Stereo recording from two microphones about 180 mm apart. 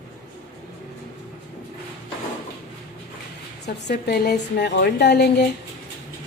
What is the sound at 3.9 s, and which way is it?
A woman's voice, 65° left (ahead or behind).